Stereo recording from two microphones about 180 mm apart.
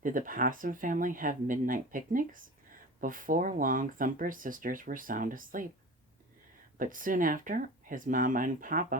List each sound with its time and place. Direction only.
0.0 s speech: 50° right (ahead or behind)
6.7 s speech: 50° right (ahead or behind)